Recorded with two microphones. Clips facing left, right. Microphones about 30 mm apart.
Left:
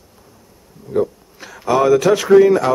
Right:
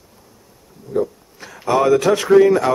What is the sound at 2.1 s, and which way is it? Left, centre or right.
Speech, centre.